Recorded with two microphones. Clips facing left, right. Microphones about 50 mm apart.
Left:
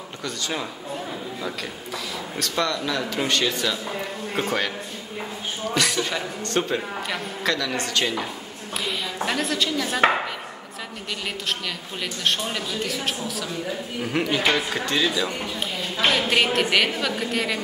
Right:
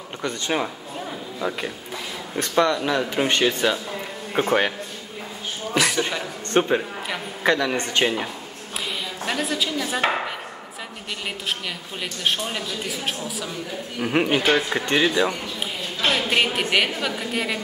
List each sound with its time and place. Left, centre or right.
0.2 s speech: right
2.3 s speech: right
5.7 s a sound: centre
6.5 s speech: right
8.8 s a sound: centre
9.9 s chopping: centre
12.0 s speech: centre
14.0 s speech: right
16.1 s a woman's voice: centre